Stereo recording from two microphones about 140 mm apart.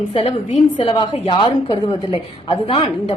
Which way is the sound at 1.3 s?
35° left (ahead or behind).